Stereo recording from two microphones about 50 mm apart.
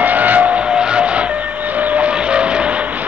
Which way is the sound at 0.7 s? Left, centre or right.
Centre.